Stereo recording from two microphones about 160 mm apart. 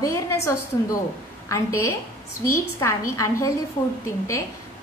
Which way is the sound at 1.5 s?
15° left (ahead or behind).